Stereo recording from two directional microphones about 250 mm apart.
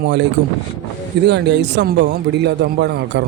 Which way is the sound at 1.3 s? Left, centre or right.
Right.